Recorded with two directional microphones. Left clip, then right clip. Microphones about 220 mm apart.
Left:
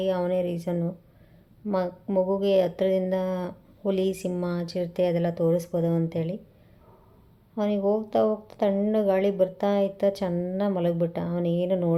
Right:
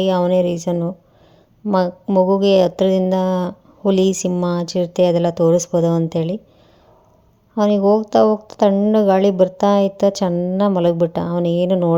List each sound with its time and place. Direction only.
0.0 s speech: 35° right (ahead or behind)
7.5 s speech: 35° right (ahead or behind)